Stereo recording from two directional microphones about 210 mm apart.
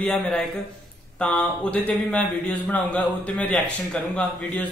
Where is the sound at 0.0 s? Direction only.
5° left (ahead or behind).